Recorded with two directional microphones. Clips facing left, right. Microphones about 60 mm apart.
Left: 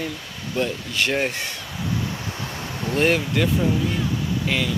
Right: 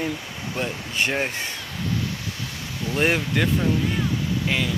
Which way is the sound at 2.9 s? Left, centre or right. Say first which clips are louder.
Left 2 dB; centre.